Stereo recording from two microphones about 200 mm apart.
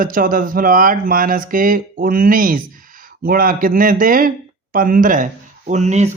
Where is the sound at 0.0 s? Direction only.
45° right (ahead or behind).